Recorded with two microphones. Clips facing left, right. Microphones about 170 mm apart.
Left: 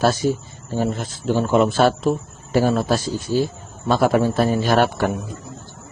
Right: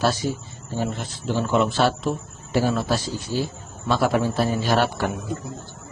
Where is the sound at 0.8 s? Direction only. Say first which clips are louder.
Left 4 dB; 45° left (ahead or behind).